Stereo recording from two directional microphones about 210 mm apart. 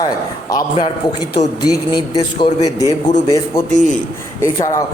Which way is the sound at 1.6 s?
20° left (ahead or behind).